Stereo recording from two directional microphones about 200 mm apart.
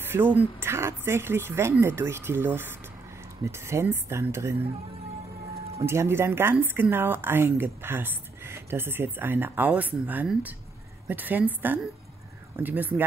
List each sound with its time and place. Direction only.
0.0 s speech: 10° right (ahead or behind)
5.8 s speech: 15° right (ahead or behind)